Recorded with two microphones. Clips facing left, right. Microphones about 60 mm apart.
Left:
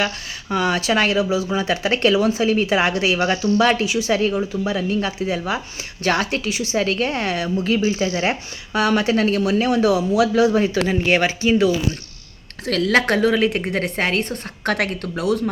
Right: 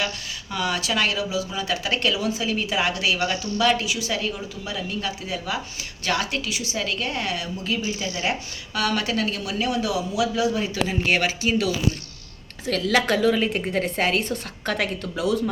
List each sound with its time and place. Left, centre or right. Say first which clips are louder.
0.5 s speech: left 6 dB; left
12.6 s speech: left 4 dB; left
12.9 s speech: left 3 dB; left